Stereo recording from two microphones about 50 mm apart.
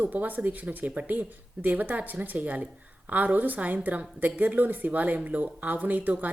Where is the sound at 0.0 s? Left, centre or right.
Right.